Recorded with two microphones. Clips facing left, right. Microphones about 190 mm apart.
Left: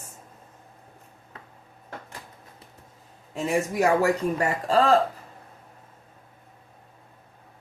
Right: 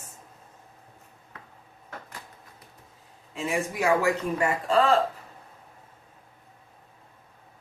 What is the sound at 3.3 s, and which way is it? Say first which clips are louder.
Speech: left 4 dB; 40° left (ahead or behind).